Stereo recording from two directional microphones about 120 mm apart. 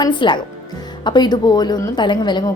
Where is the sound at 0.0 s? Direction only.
40° left (ahead or behind).